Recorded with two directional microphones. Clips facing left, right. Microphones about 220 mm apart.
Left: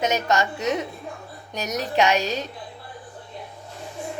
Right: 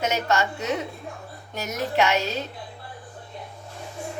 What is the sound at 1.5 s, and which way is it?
Speech, 20° left (ahead or behind).